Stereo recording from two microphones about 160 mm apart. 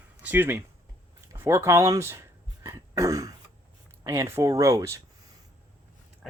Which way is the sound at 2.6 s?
20° right (ahead or behind).